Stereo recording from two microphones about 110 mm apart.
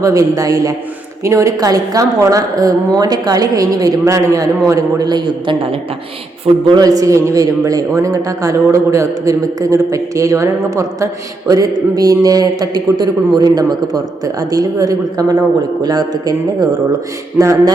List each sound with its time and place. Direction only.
0.0 s a man's voice: 30° right (ahead or behind)
6.7 s a man's voice: 35° right (ahead or behind)